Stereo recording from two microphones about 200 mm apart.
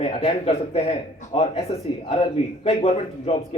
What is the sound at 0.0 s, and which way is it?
Speech, 25° left (ahead or behind).